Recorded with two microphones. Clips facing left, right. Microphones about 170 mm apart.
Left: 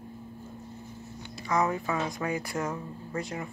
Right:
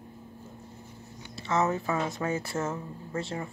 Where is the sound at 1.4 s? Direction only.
25° right (ahead or behind).